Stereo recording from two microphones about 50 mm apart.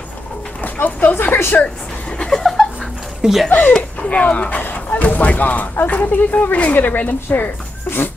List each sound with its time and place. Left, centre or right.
0.6 s dog: left
1.2 s speech: left
2.1 s a sound: centre
3.2 s speech: centre
3.4 s speech: left